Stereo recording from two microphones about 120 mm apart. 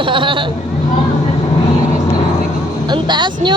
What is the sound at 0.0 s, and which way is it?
Speech, 45° right (ahead or behind).